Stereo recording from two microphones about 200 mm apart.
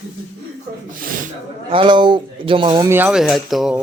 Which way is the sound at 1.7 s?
25° right (ahead or behind).